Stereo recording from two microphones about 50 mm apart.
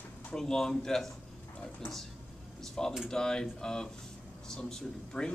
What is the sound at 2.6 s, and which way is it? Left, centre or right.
A man's voice, centre.